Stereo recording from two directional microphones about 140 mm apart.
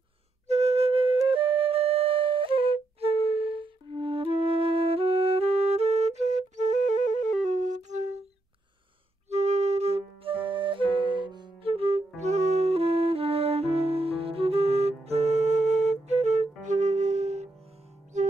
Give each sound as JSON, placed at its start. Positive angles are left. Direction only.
{"t": 0.5, "sound": "flute", "side_deg": -50}
{"t": 9.3, "sound": "flute", "side_deg": -55}
{"t": 16.6, "sound": "music", "side_deg": -60}